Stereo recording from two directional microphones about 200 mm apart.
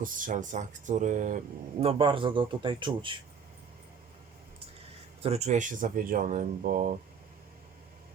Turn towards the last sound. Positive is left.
turn(degrees=-40)  # may be behind; listen again after turning